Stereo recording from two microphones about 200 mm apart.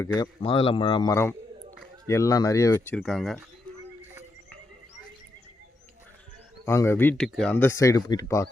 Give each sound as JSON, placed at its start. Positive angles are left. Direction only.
{"t": 0.0, "sound": "speech", "side_deg": 20}
{"t": 6.7, "sound": "speech", "side_deg": 15}